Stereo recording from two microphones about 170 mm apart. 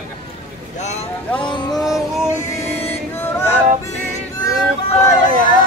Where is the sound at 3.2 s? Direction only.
15° left (ahead or behind).